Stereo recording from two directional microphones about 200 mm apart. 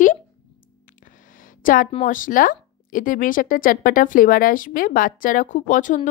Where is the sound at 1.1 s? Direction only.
40° left (ahead or behind).